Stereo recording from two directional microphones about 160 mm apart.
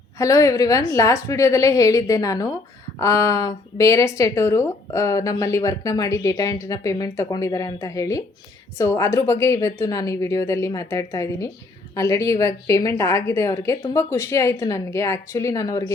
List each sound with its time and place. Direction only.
0.2 s speech: 20° left (ahead or behind)